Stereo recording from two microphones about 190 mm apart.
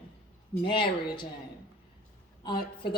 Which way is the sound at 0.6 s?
25° left (ahead or behind).